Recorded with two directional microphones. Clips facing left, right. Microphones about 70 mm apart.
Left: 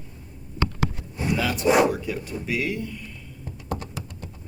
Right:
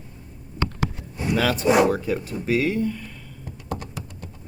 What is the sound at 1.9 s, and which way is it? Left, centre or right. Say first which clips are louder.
Speech: right 4 dB; right.